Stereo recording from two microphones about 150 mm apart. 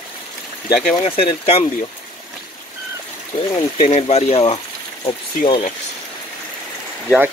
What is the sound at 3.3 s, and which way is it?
Speech, 55° left (ahead or behind).